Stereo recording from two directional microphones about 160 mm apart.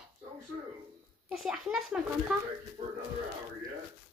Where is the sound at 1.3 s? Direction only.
5° right (ahead or behind).